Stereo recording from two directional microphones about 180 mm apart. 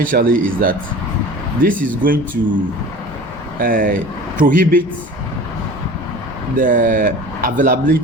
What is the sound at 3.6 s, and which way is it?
A man's voice, 50° right (ahead or behind).